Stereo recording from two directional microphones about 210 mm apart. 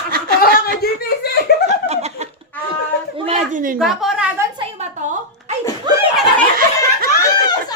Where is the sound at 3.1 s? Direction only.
30° right (ahead or behind).